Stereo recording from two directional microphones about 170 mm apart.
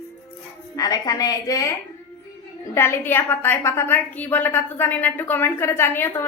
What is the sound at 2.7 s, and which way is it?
A woman's voice, 15° left (ahead or behind).